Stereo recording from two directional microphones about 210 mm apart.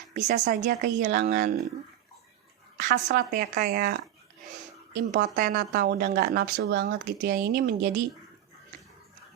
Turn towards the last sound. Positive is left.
turn(degrees=-45)  # may be behind; listen again after turning